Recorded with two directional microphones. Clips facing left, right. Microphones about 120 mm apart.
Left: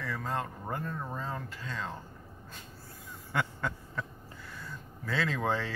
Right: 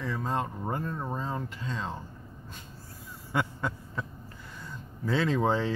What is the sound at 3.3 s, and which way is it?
Quack, 15° right (ahead or behind).